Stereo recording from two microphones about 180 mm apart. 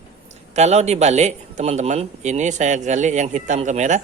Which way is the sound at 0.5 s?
40° right (ahead or behind).